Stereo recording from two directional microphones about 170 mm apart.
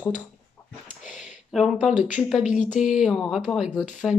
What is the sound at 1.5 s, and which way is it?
Speech, centre (ahead or behind).